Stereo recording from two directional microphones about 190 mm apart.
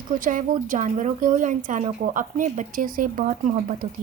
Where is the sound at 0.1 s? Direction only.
45° right (ahead or behind).